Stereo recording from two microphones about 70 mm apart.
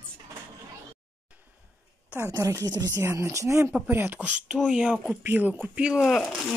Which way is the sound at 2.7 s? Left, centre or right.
Right.